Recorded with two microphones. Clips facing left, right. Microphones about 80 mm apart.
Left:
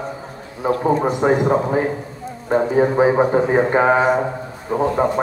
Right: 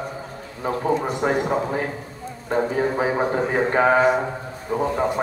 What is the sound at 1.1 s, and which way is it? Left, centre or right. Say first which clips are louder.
A man's voice: left 5 dB; left.